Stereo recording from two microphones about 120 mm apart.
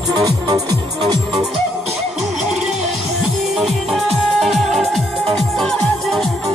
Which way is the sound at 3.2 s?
Centre (ahead or behind).